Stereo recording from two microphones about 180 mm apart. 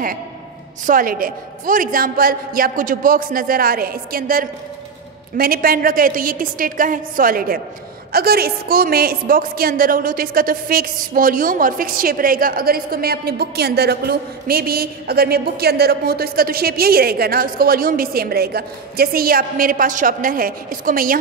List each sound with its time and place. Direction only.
0.8 s a man's voice: 50° right (ahead or behind)